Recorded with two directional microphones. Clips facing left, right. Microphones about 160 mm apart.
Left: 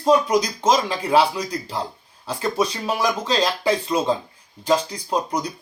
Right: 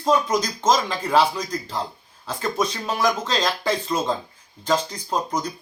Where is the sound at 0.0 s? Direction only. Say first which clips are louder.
Left 3 dB; 10° left (ahead or behind).